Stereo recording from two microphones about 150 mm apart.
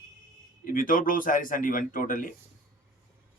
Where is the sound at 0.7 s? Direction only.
65° left (ahead or behind).